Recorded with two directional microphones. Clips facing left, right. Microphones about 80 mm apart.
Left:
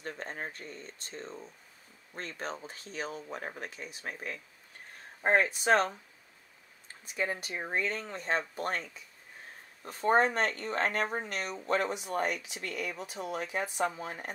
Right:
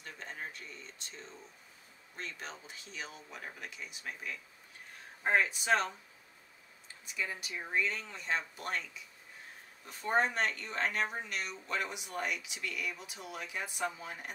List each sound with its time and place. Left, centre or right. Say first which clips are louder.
0.0 s speech: left 5 dB; left